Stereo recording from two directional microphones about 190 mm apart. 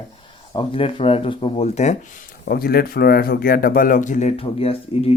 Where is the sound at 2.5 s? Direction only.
55° left (ahead or behind).